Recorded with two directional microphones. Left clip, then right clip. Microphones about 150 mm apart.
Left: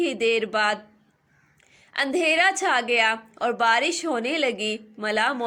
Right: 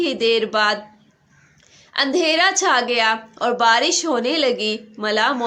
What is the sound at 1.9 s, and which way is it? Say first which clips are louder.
A woman's voice: right 4 dB; 20° left (ahead or behind).